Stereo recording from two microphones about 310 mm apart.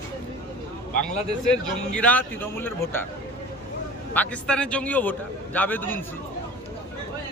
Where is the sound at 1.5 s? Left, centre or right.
Centre.